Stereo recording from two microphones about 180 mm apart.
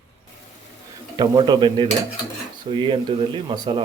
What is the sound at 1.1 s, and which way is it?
Speech, 25° right (ahead or behind).